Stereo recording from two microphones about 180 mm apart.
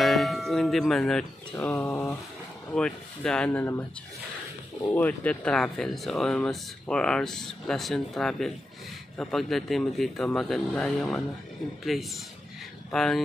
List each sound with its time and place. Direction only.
0.0 s music: centre (ahead or behind)
1.6 s speech: 15° left (ahead or behind)
2.7 s speech: 5° left (ahead or behind)
4.9 s speech: 10° left (ahead or behind)